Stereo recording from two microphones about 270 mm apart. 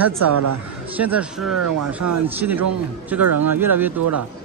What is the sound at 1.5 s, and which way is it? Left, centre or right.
Speech, right.